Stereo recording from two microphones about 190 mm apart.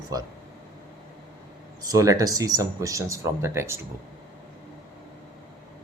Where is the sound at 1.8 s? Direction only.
20° right (ahead or behind).